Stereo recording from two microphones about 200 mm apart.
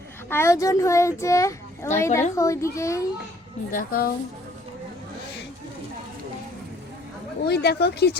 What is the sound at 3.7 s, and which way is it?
Speech, 45° left (ahead or behind).